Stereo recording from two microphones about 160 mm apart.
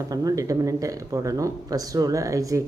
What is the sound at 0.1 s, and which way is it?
Speech, 20° right (ahead or behind).